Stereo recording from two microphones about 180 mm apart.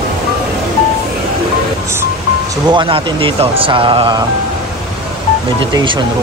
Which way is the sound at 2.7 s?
25° right (ahead or behind).